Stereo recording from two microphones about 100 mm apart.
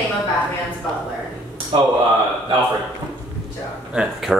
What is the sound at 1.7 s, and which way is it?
Speech, 60° right (ahead or behind).